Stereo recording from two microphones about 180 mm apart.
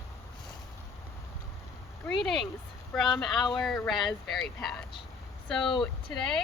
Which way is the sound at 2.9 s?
Centre (ahead or behind).